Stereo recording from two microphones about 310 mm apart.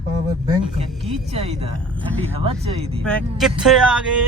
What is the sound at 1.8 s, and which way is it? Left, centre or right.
Speech, centre.